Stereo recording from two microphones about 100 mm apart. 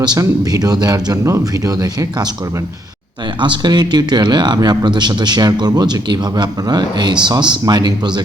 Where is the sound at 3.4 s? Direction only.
50° right (ahead or behind).